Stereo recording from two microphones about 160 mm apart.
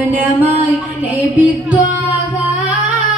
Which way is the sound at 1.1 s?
10° right (ahead or behind).